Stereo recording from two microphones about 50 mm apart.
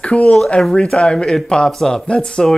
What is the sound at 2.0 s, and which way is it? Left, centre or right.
Speech, centre.